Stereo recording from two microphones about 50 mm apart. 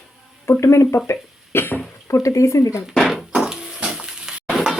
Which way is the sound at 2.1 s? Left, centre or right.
Left.